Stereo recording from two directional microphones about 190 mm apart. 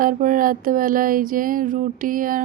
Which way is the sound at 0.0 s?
45° right (ahead or behind).